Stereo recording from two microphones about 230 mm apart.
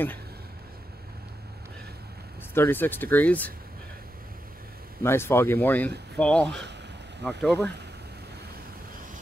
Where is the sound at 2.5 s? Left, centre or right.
Centre.